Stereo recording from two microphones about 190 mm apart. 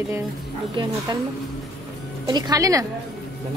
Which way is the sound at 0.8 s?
25° right (ahead or behind).